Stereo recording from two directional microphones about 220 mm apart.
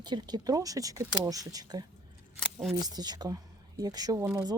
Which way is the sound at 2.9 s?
20° right (ahead or behind).